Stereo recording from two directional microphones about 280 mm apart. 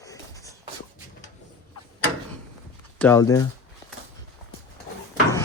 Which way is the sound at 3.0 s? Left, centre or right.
Centre.